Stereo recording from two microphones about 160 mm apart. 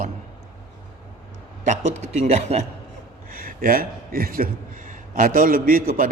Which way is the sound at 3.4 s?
65° right (ahead or behind).